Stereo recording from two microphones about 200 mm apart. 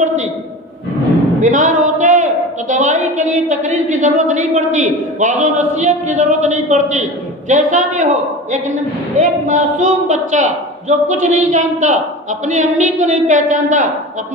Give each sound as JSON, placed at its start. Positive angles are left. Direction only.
{"t": 1.4, "sound": "a woman's voice", "side_deg": -40}